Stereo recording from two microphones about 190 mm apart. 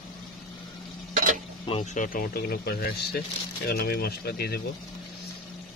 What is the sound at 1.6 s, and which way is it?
Speech, 35° left (ahead or behind).